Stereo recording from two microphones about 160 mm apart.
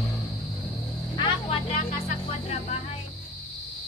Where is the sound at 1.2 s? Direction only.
35° left (ahead or behind).